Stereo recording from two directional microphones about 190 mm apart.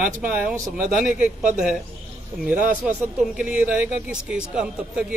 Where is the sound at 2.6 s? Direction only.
45° right (ahead or behind).